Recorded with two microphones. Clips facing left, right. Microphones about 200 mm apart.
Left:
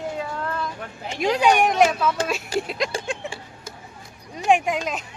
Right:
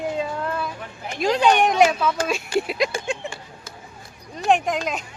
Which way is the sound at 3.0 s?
Centre (ahead or behind).